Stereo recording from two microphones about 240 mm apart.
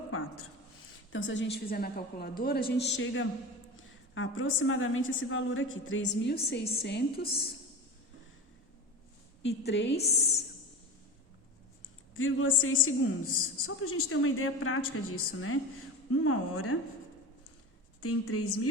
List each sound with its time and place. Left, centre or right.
0.1 s a sound: left
1.1 s a woman's voice: left
9.4 s a woman's voice: left
12.1 s a woman's voice: left
18.0 s a woman's voice: left